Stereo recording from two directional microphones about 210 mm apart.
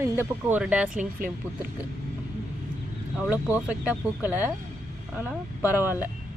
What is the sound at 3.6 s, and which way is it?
Speech, 5° right (ahead or behind).